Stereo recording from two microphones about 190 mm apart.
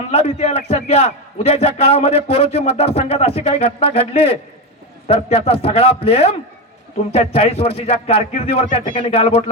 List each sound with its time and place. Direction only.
0.1 s speech: 35° left (ahead or behind)